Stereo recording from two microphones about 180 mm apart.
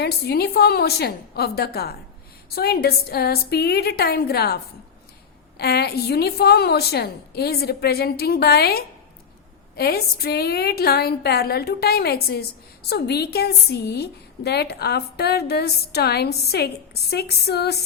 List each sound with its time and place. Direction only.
0.0 s a woman's voice: 60° left (ahead or behind)